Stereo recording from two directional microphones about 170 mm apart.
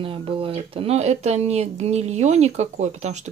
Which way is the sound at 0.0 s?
30° right (ahead or behind).